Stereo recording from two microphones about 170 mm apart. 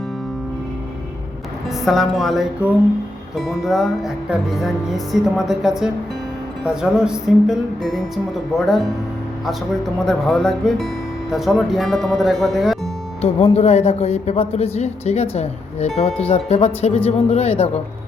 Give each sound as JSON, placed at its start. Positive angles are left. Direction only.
{"t": 1.8, "sound": "music", "side_deg": 0}
{"t": 10.1, "sound": "music", "side_deg": 5}
{"t": 13.2, "sound": "speech", "side_deg": 40}